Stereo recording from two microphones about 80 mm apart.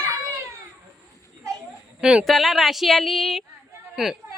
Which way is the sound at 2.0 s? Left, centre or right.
Centre.